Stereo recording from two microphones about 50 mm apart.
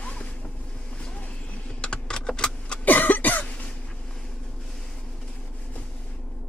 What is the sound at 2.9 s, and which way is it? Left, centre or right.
Cough, left.